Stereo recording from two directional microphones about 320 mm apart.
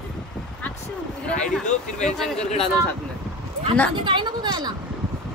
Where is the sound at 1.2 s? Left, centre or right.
Centre.